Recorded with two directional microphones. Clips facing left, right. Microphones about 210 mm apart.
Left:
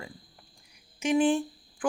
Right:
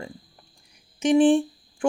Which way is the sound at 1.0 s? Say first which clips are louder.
Right 7 dB; 30° right (ahead or behind).